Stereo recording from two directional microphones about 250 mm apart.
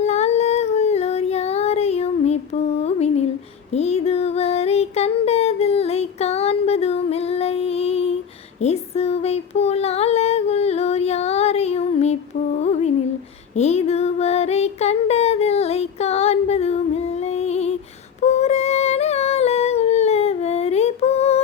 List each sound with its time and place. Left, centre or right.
0.0 s a sound: left
2.8 s humming: left
3.7 s child singing: left
8.6 s a sound: left
12.5 s music: left
13.6 s child singing: left
18.2 s humming: left